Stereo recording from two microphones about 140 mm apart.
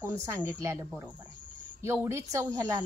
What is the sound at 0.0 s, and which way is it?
A woman's voice, 15° right (ahead or behind).